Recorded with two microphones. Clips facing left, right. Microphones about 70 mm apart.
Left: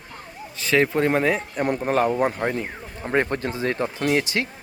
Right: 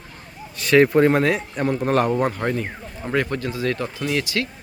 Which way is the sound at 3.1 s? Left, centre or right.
Left.